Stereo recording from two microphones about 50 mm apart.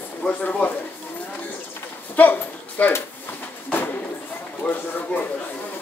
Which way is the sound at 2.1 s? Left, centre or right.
Left.